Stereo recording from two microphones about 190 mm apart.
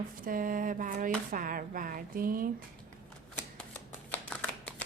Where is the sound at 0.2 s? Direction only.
45° right (ahead or behind).